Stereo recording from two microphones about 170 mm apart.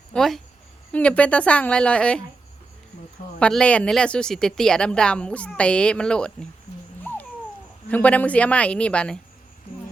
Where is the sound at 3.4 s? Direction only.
5° left (ahead or behind).